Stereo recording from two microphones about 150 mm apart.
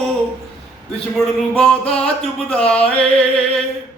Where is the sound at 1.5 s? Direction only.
5° left (ahead or behind).